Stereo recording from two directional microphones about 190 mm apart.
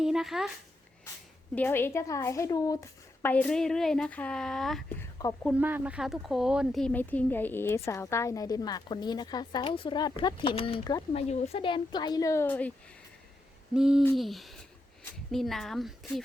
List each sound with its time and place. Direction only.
0.0 s speech: centre (ahead or behind)
1.5 s a woman's voice: 10° left (ahead or behind)
3.2 s speech: 5° left (ahead or behind)
5.5 s speech: 10° right (ahead or behind); by 11.0 s 25° left (ahead or behind)
11.1 s speech: 35° left (ahead or behind); by 12.7 s 10° left (ahead or behind)
13.7 s speech: 5° right (ahead or behind)